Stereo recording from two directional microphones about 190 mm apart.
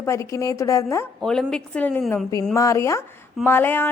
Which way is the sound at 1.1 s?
5° left (ahead or behind).